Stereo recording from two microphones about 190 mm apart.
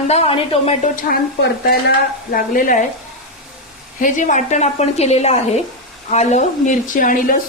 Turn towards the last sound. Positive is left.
turn(degrees=45)  # may be behind; listen again after turning